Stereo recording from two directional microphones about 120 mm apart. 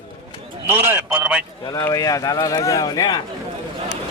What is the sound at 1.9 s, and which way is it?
Speech, 30° left (ahead or behind).